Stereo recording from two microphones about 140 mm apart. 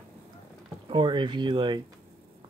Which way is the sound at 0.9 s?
35° right (ahead or behind).